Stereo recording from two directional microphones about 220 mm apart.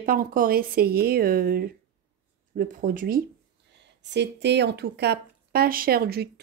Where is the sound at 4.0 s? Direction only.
50° right (ahead or behind).